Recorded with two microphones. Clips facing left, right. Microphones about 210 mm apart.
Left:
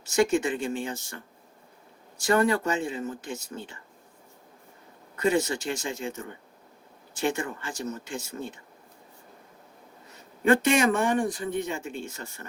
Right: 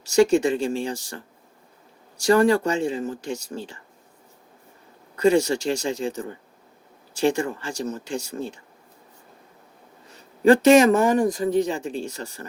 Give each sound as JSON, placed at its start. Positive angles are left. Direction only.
{"t": 0.2, "sound": "speech", "side_deg": -30}
{"t": 2.2, "sound": "speech", "side_deg": -30}
{"t": 5.1, "sound": "speech", "side_deg": -30}
{"t": 7.3, "sound": "speech", "side_deg": -30}
{"t": 10.1, "sound": "a man's voice", "side_deg": -35}